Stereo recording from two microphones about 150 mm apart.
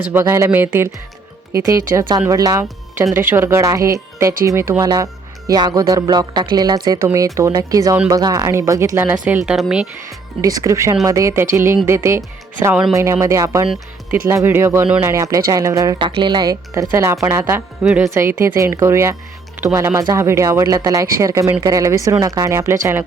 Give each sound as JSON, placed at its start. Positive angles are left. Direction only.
{"t": 0.0, "sound": "speech", "side_deg": -15}
{"t": 10.4, "sound": "speech", "side_deg": -20}
{"t": 17.8, "sound": "speech", "side_deg": 0}
{"t": 18.1, "sound": "speech", "side_deg": -15}